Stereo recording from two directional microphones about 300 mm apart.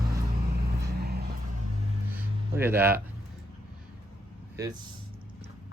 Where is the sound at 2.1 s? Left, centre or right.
Centre.